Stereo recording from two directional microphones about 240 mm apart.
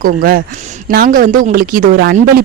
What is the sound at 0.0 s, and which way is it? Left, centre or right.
A woman's voice, right.